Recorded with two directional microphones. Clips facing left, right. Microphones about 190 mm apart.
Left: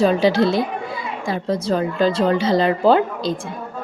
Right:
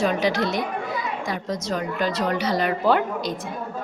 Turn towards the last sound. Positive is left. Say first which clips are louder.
# left 5 dB
turn(degrees=30)  # may be behind; listen again after turning